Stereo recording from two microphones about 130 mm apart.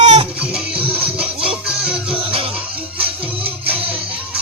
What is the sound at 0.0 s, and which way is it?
Music, 60° right (ahead or behind).